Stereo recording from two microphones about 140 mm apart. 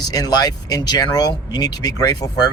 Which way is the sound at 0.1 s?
25° left (ahead or behind).